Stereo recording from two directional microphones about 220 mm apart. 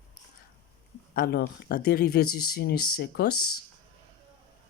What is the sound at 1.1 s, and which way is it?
Speech, 45° left (ahead or behind).